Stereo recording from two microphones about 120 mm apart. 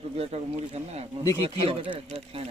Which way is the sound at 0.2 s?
60° right (ahead or behind).